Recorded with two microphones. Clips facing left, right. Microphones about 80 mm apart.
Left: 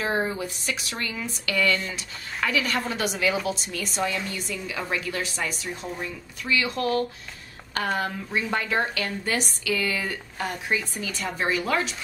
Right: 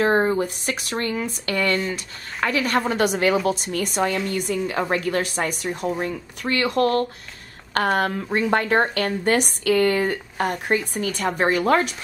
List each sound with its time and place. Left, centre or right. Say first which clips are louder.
0.0 s a woman's voice: right 7 dB; right